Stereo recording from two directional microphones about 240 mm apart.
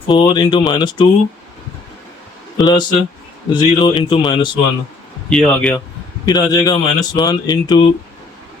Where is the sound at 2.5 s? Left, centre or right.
Centre.